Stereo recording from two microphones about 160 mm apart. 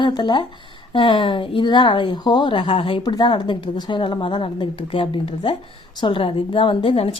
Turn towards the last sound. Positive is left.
turn(degrees=35)  # may be behind; listen again after turning